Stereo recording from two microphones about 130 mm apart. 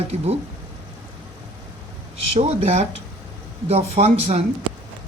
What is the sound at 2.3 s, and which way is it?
Speech, 65° right (ahead or behind).